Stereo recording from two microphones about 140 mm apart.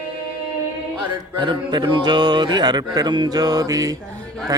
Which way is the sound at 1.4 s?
30° right (ahead or behind).